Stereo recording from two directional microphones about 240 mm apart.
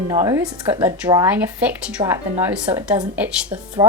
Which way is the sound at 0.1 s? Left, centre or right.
Centre.